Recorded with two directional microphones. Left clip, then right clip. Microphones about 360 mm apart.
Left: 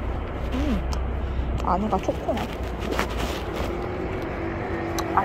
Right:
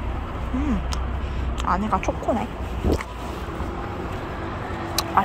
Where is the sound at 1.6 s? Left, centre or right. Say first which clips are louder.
Right 1 dB; centre.